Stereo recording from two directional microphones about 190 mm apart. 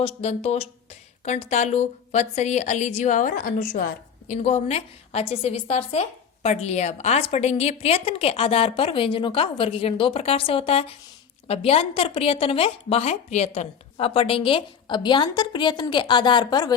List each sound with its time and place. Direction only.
0.0 s a woman's voice: 30° left (ahead or behind); by 3.8 s 50° left (ahead or behind)
4.3 s a woman's voice: 35° left (ahead or behind)